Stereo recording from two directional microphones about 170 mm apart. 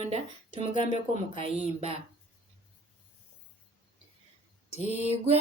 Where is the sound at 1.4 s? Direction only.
35° right (ahead or behind).